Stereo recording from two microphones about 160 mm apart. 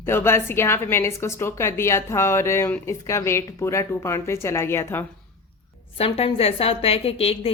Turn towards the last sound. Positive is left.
turn(degrees=35)  # may be behind; listen again after turning